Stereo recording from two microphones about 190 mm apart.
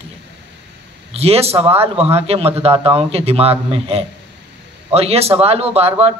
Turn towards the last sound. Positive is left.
turn(degrees=-30)  # may be behind; listen again after turning